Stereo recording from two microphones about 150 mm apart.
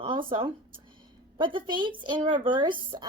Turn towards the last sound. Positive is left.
turn(degrees=-30)  # may be behind; listen again after turning